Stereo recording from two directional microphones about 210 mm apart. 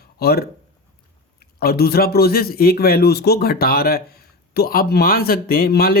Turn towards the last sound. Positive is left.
turn(degrees=45)  # may be behind; listen again after turning